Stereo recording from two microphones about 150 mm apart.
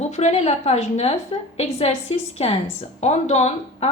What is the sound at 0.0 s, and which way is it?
A woman's voice, 50° left (ahead or behind).